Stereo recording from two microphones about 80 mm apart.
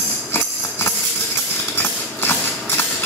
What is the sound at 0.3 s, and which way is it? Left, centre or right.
Music, left.